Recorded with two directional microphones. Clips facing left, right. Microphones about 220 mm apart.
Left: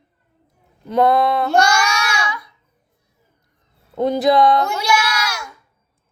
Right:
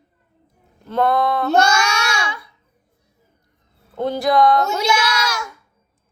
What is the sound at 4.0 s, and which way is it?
Speech, 20° left (ahead or behind).